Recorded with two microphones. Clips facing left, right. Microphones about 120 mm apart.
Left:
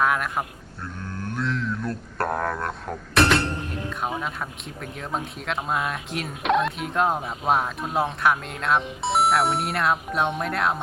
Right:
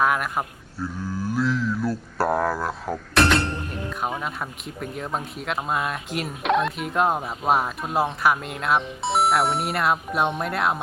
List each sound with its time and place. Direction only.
0.0 s mantra: centre (ahead or behind)
3.8 s speech: 5° right (ahead or behind)